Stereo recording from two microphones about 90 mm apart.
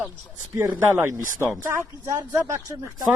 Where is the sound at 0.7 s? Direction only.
25° right (ahead or behind).